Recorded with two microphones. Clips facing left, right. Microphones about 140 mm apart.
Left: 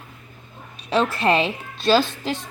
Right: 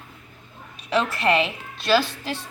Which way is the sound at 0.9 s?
30° left (ahead or behind).